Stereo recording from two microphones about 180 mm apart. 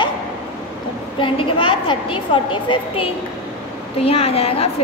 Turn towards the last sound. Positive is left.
turn(degrees=35)  # may be behind; listen again after turning